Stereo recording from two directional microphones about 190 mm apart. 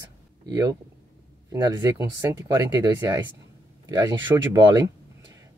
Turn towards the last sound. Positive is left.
turn(degrees=-20)  # may be behind; listen again after turning